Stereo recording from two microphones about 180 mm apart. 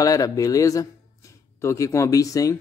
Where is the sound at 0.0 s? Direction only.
20° left (ahead or behind).